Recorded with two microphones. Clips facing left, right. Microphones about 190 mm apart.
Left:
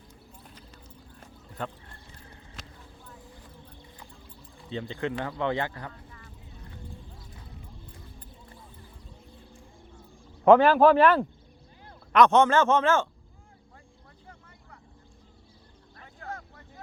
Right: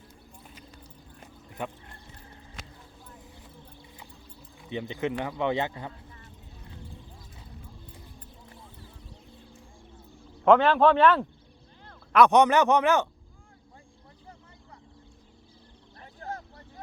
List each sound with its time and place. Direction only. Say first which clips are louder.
1.2 s a sound: even; 15° right (ahead or behind)
4.7 s speech: right 1 dB; 15° right (ahead or behind)
10.5 s speech: left 2 dB; 5° left (ahead or behind)
12.1 s speech: even; 15° right (ahead or behind)
16.2 s vehicle: right 2 dB; 35° right (ahead or behind)